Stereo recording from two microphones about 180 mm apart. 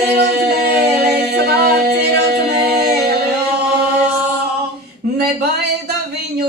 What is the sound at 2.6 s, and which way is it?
Music, 60° right (ahead or behind).